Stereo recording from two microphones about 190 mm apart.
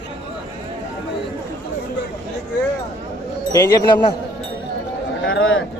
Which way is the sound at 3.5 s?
20° left (ahead or behind).